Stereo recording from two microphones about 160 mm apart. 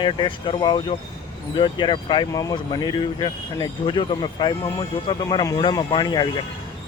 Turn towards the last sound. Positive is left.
turn(degrees=25)  # may be behind; listen again after turning